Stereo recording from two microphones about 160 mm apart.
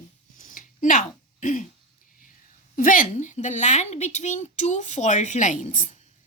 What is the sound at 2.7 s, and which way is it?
A woman's voice, 55° left (ahead or behind).